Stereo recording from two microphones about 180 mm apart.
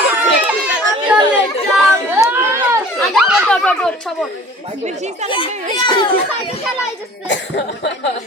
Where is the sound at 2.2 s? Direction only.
15° right (ahead or behind).